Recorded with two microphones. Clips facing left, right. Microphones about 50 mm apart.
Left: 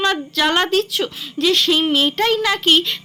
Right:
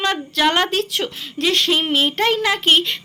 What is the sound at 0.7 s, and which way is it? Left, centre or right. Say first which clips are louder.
A woman's voice: left 3 dB; right.